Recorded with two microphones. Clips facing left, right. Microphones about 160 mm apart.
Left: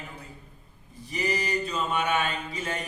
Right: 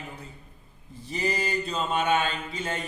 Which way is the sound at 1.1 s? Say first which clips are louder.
Even; 25° right (ahead or behind).